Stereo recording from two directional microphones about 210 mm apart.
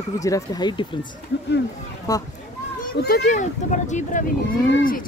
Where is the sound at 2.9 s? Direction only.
50° left (ahead or behind).